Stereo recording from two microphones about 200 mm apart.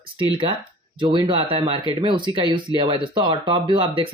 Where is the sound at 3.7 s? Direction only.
25° right (ahead or behind).